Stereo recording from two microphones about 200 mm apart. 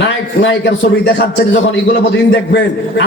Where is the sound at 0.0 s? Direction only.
60° left (ahead or behind).